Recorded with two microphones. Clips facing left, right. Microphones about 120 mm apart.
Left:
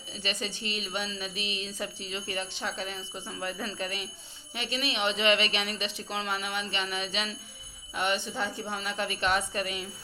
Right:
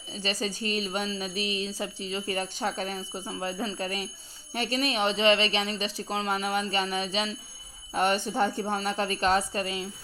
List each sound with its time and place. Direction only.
0.1 s speech: 35° right (ahead or behind)
3.2 s speech: 30° right (ahead or behind)
4.5 s speech: 45° right (ahead or behind)
7.9 s speech: 45° right (ahead or behind)